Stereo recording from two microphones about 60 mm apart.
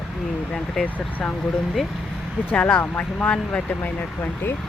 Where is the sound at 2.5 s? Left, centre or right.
Left.